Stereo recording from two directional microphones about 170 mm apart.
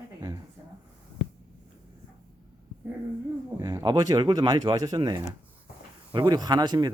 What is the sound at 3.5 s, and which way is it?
Speech, 20° right (ahead or behind).